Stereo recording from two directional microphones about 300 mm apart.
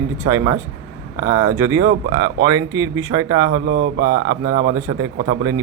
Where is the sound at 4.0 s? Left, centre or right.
Centre.